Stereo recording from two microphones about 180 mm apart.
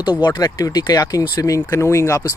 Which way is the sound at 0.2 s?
20° left (ahead or behind).